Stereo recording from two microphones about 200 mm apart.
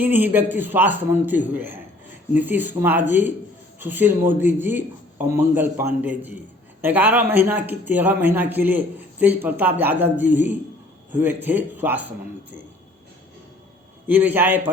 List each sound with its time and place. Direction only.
0.0 s a man's voice: 10° right (ahead or behind)
14.1 s a man's voice: 10° right (ahead or behind)